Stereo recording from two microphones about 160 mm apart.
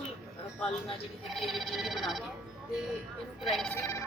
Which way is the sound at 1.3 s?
Centre (ahead or behind).